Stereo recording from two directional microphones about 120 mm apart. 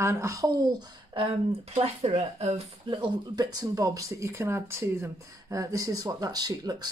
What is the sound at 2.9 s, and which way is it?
Speech, 35° right (ahead or behind).